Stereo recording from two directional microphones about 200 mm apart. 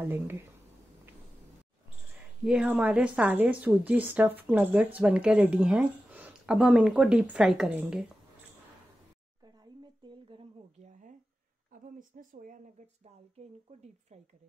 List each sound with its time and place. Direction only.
0.0 s a woman's voice: 10° right (ahead or behind)
2.4 s a woman's voice: 5° right (ahead or behind)
10.0 s a sound: 30° right (ahead or behind)
11.8 s speech: 40° right (ahead or behind)